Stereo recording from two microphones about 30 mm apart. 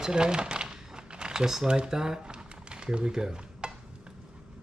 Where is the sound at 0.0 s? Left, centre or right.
Right.